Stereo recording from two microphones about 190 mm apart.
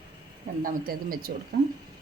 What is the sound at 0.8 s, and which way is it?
Speech, 50° right (ahead or behind).